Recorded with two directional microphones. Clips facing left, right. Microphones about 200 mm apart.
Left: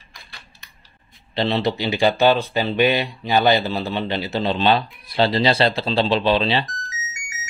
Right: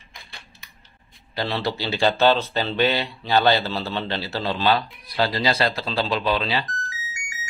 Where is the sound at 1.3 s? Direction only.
25° left (ahead or behind).